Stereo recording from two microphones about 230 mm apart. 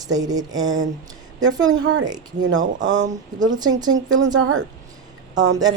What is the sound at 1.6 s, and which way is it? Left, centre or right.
Speech, right.